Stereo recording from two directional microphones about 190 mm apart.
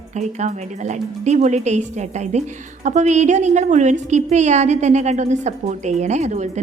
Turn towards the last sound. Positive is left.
turn(degrees=-35)  # may be behind; listen again after turning